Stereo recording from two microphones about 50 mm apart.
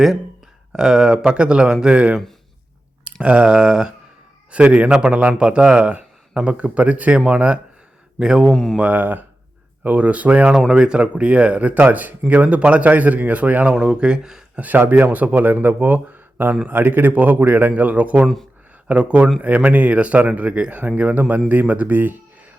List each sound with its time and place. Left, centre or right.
0.7 s speech: centre
3.0 s a sound: right
3.5 s speech: centre
8.2 s speech: centre
8.8 s speech: right
13.7 s speech: centre
14.6 s speech: right